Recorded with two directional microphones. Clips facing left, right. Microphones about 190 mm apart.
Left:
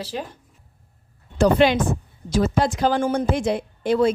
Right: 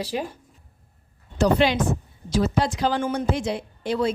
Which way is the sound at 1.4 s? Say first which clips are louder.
Left 3 dB; 55° left (ahead or behind).